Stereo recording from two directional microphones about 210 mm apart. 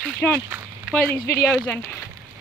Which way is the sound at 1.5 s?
5° left (ahead or behind).